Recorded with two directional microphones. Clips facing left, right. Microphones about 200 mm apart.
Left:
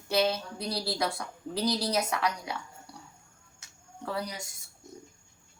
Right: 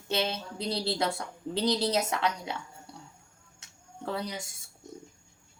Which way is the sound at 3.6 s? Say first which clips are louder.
Right 1 dB; 25° right (ahead or behind).